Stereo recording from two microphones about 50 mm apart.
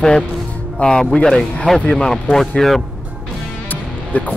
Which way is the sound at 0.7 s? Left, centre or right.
Centre.